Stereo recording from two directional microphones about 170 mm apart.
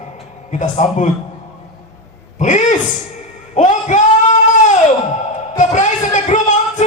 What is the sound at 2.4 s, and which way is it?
A man's voice, 45° left (ahead or behind).